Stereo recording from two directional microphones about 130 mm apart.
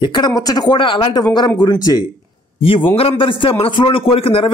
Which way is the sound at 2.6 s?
45° left (ahead or behind).